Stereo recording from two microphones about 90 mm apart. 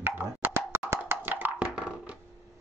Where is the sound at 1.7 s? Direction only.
10° right (ahead or behind).